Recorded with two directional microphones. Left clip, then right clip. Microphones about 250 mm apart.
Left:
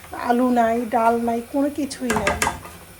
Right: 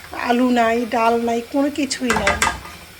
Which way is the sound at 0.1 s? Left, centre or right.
Centre.